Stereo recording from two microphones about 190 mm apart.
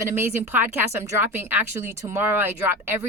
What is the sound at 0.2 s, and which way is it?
Speech, 10° right (ahead or behind).